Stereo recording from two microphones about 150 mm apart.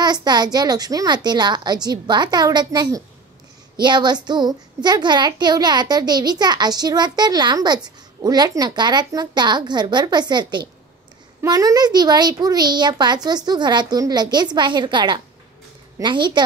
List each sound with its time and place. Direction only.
0.0 s a child's voice: 30° right (ahead or behind)